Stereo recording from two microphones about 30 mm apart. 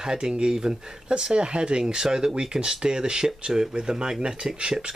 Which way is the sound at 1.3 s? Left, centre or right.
Right.